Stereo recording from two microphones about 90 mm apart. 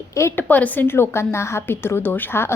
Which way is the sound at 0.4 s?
20° left (ahead or behind).